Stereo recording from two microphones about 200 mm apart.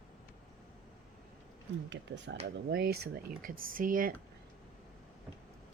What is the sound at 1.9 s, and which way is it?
Speech, 60° right (ahead or behind).